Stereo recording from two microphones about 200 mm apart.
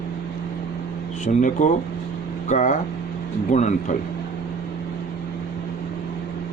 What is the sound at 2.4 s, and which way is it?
A man's voice, 40° left (ahead or behind).